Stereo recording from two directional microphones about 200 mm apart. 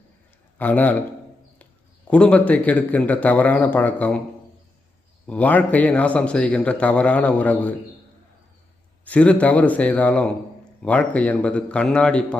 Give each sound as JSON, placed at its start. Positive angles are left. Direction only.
{"t": 0.6, "sound": "a man's voice", "side_deg": 10}
{"t": 2.0, "sound": "a man's voice", "side_deg": 5}
{"t": 5.2, "sound": "a man's voice", "side_deg": 5}
{"t": 9.0, "sound": "a man's voice", "side_deg": 5}